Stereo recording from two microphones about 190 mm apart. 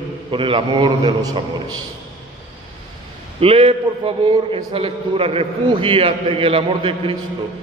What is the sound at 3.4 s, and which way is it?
A man's voice, 30° right (ahead or behind).